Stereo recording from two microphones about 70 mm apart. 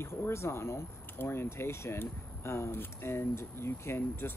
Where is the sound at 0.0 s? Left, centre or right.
Left.